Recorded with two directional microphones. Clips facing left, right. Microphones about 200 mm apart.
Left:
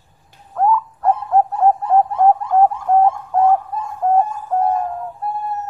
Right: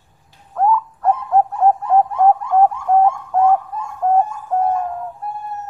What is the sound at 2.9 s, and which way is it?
Bird, centre (ahead or behind).